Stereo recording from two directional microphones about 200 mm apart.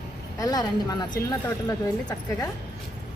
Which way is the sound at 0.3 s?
20° left (ahead or behind).